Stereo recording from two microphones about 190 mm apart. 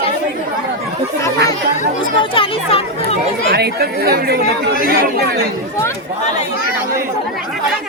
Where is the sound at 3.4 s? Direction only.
55° right (ahead or behind).